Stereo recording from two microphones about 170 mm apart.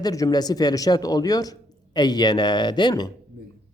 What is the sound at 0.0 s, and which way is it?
A man's voice, 20° left (ahead or behind).